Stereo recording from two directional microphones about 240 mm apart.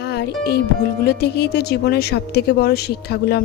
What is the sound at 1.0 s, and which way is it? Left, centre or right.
A woman's voice, left.